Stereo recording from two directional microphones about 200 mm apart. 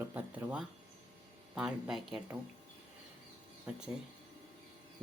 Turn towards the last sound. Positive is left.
turn(degrees=-5)  # may be behind; listen again after turning